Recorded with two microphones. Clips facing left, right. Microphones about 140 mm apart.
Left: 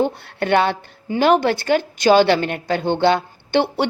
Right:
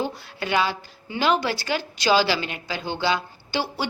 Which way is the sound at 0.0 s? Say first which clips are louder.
Left 8 dB; 60° left (ahead or behind).